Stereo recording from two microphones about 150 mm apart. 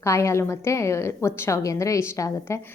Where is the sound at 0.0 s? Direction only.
20° left (ahead or behind).